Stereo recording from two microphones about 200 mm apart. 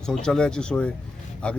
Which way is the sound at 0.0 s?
5° left (ahead or behind).